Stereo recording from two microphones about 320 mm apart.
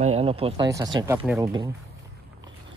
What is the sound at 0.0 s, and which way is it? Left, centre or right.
Speech, centre.